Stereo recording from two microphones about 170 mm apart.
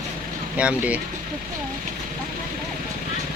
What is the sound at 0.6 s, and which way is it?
Speech, 5° right (ahead or behind).